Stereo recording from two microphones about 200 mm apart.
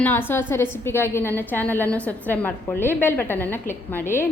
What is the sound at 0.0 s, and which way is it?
A woman's voice, 10° left (ahead or behind).